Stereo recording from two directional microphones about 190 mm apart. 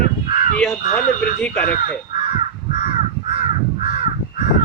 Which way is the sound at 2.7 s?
45° left (ahead or behind).